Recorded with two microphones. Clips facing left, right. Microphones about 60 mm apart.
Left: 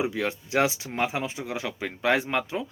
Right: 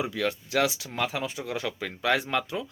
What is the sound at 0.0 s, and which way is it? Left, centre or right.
Speech, left.